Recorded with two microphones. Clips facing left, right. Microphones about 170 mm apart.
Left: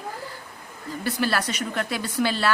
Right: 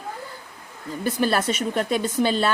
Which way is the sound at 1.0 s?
20° right (ahead or behind).